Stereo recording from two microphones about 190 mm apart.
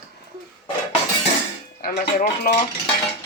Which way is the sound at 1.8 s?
50° left (ahead or behind).